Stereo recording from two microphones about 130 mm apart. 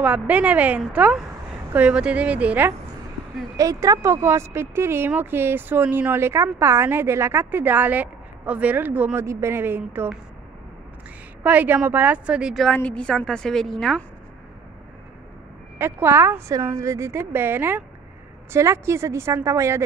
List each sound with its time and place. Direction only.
0.0 s speech: 10° right (ahead or behind)
3.5 s speech: 25° right (ahead or behind)
11.4 s speech: 15° right (ahead or behind)
12.6 s a woman's voice: 10° left (ahead or behind)
15.8 s a woman's voice: 20° right (ahead or behind)